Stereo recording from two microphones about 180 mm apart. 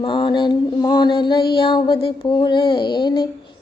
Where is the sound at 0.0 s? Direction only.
25° left (ahead or behind).